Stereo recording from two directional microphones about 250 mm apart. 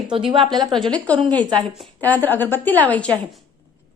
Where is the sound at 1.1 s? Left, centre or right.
Centre.